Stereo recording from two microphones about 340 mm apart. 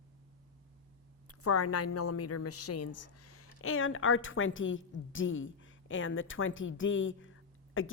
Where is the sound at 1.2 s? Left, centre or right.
Left.